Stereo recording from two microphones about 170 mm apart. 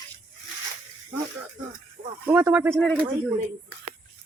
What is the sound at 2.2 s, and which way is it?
Speech, 10° right (ahead or behind).